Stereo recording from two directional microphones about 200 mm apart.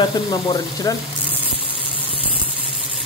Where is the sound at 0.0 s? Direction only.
20° left (ahead or behind).